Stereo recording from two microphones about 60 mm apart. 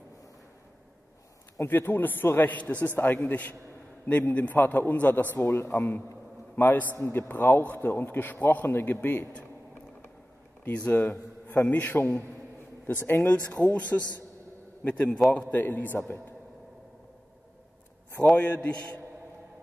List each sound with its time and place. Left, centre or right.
1.7 s a man's voice: left
2.5 s a man's voice: left
10.6 s a man's voice: left
13.3 s a man's voice: left
18.3 s a man's voice: left